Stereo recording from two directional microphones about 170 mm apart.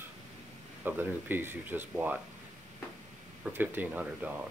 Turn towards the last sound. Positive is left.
turn(degrees=-10)  # may be behind; listen again after turning